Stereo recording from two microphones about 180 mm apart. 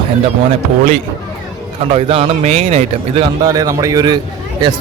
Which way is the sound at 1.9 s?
35° right (ahead or behind).